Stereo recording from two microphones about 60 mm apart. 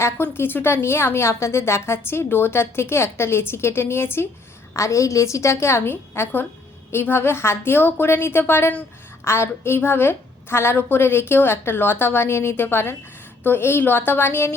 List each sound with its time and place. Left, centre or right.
0.2 s a woman's voice: left
4.7 s a woman's voice: left